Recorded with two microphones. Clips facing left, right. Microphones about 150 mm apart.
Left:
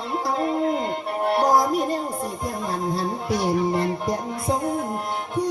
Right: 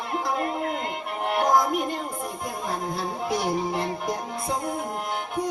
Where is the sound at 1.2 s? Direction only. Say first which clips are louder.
Left 2 dB; 35° left (ahead or behind).